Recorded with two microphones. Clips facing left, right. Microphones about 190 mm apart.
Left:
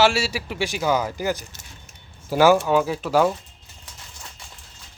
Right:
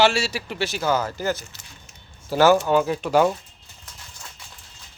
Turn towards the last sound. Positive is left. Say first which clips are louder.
# right 1 dB
turn(degrees=0)  # may be behind; listen again after turning